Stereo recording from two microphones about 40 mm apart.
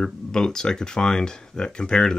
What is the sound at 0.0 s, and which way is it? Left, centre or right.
Speech, centre.